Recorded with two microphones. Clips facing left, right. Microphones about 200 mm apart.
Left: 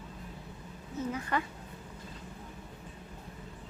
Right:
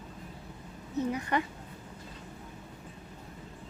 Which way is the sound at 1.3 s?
20° right (ahead or behind).